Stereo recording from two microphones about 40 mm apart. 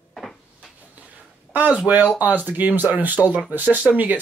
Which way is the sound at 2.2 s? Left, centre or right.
Right.